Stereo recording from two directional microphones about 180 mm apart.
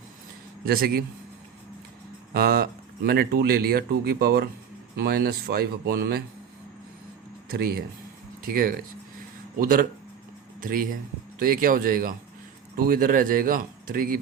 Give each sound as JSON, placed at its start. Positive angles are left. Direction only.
{"t": 0.6, "sound": "speech", "side_deg": -55}
{"t": 2.3, "sound": "speech", "side_deg": -60}
{"t": 7.5, "sound": "a man's voice", "side_deg": -60}